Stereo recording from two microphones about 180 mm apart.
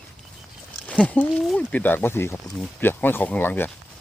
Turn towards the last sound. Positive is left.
turn(degrees=10)  # may be behind; listen again after turning